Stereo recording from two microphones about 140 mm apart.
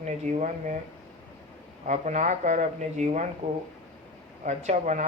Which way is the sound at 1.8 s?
60° right (ahead or behind).